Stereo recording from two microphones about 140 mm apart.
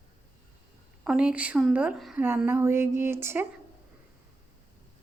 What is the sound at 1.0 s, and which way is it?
A woman's voice, 10° right (ahead or behind).